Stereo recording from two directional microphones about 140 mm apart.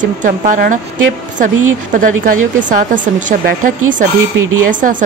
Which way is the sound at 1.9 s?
70° right (ahead or behind).